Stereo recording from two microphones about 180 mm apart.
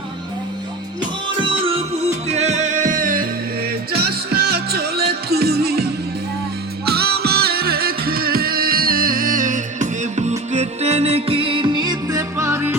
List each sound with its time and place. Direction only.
1.4 s music: 30° right (ahead or behind); by 3.2 s 50° right (ahead or behind)
3.9 s music: 60° right (ahead or behind)
6.8 s music: 60° right (ahead or behind); by 12.7 s 15° right (ahead or behind)